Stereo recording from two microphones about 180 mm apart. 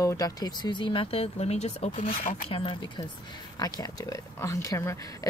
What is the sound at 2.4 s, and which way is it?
Speech, 30° left (ahead or behind).